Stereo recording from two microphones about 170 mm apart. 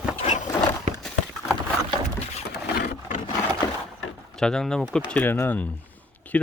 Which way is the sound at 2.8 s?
55° left (ahead or behind).